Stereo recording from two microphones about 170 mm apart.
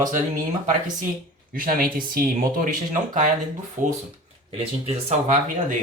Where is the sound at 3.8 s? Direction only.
50° right (ahead or behind).